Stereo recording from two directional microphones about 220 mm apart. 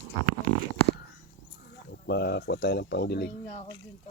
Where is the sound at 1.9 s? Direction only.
45° left (ahead or behind).